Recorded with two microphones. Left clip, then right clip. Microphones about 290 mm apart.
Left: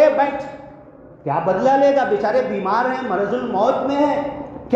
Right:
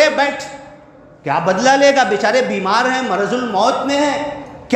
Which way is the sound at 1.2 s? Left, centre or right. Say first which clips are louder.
Right 3 dB; right.